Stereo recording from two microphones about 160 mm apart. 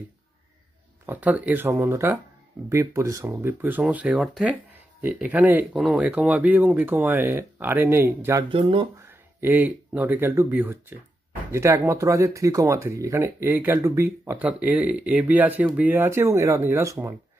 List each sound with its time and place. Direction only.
1.0 s speech: 10° right (ahead or behind)
8.5 s speech: 35° right (ahead or behind)
9.0 s speech: 15° right (ahead or behind)